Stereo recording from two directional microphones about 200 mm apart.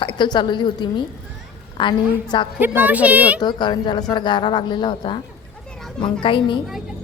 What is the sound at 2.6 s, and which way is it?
Speech, 10° right (ahead or behind).